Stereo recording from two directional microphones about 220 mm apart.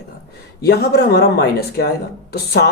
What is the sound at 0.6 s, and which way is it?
Speech, 45° left (ahead or behind).